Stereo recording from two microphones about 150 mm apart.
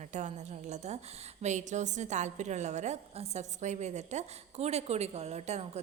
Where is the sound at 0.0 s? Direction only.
50° right (ahead or behind).